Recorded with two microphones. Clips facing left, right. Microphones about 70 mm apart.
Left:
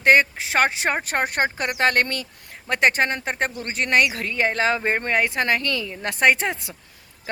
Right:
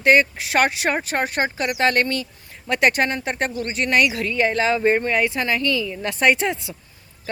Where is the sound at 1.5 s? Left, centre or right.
Left.